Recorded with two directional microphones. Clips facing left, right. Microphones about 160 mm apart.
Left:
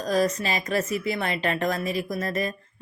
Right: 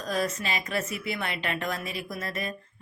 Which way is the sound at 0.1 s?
40° left (ahead or behind).